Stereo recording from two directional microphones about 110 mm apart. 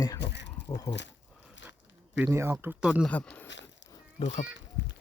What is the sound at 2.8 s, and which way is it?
Speech, 10° right (ahead or behind).